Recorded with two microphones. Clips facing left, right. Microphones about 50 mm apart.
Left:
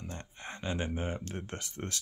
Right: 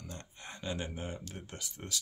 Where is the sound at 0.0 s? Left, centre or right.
Left.